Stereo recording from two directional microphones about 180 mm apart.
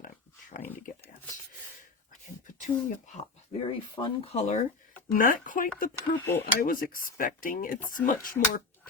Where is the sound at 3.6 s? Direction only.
30° left (ahead or behind); by 8.9 s 50° left (ahead or behind).